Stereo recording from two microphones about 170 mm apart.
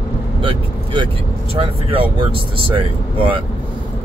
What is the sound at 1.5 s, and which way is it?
Speech, 30° right (ahead or behind).